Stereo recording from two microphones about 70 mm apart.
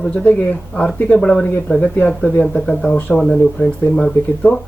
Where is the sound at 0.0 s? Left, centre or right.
Centre.